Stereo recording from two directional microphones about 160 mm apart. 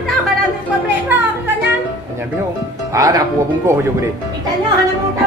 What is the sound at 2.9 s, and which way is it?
Speech, 20° right (ahead or behind).